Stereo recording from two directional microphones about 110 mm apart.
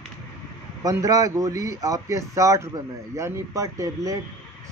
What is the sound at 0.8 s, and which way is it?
Speech, 30° right (ahead or behind).